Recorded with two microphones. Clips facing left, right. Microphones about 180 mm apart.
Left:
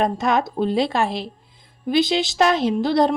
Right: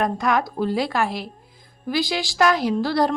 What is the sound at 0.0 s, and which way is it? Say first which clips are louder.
A woman's voice: left 2 dB; 25° left (ahead or behind).